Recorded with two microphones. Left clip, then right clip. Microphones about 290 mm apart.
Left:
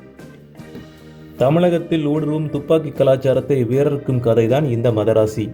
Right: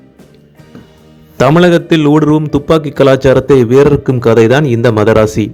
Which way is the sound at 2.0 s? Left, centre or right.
Right.